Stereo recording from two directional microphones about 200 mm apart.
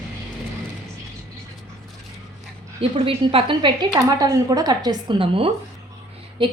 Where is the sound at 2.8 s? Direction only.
30° right (ahead or behind).